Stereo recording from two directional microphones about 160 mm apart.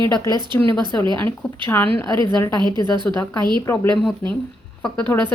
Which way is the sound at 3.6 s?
15° left (ahead or behind).